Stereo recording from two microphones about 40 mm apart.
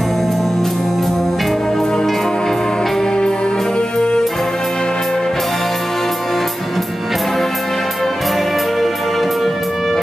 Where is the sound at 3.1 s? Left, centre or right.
Left.